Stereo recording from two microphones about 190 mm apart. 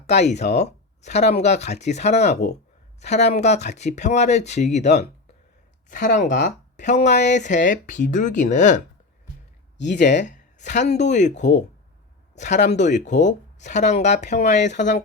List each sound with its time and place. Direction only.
0.1 s speech: 35° left (ahead or behind)
9.8 s speech: 40° left (ahead or behind)
14.7 s speech: 65° left (ahead or behind)